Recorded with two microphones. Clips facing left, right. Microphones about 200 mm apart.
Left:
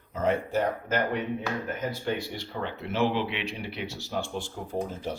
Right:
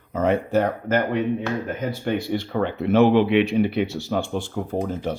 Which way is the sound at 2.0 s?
55° right (ahead or behind).